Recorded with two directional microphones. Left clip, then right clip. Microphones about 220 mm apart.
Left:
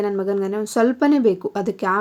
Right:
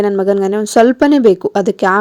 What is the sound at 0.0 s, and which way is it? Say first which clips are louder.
A woman's voice: right 9 dB; 35° right (ahead or behind).